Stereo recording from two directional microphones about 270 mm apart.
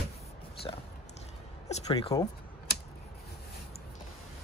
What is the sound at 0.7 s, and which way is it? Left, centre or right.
Speech, centre.